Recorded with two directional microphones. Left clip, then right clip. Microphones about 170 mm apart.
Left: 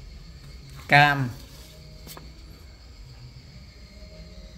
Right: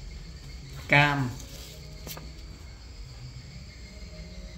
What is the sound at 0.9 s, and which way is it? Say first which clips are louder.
Speech: left 5 dB; 55° left (ahead or behind).